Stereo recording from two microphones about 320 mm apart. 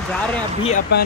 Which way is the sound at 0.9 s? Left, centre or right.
Left.